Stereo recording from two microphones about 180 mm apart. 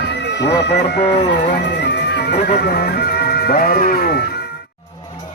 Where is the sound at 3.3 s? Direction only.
55° left (ahead or behind).